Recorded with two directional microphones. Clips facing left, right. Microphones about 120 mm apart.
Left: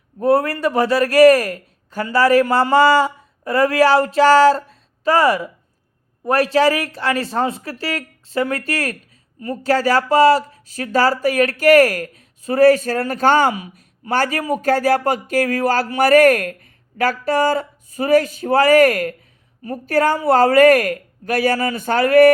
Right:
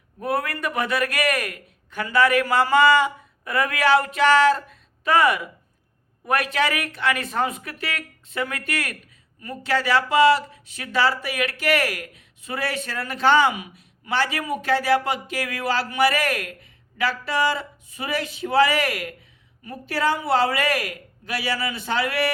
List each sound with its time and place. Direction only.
0.2 s a man's voice: 30° left (ahead or behind); by 22.3 s 50° left (ahead or behind)